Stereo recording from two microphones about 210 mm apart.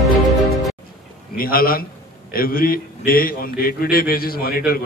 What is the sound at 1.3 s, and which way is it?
A man's voice, 45° left (ahead or behind).